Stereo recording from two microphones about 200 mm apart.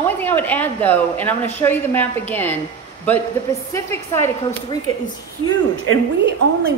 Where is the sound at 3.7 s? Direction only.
15° left (ahead or behind).